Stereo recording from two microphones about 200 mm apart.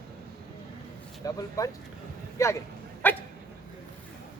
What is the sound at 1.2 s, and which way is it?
Speech, 15° left (ahead or behind).